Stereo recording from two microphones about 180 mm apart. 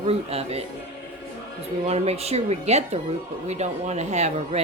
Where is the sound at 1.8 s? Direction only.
35° right (ahead or behind).